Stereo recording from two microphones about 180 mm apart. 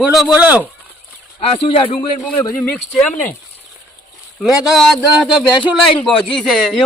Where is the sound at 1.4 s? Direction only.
30° left (ahead or behind).